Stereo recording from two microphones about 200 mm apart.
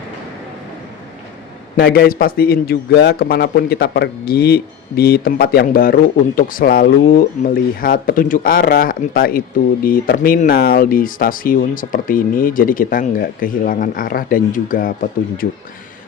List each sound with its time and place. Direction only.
1.7 s a man's voice: 50° left (ahead or behind)